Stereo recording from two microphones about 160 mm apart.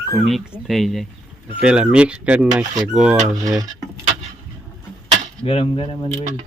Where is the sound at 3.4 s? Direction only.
25° right (ahead or behind).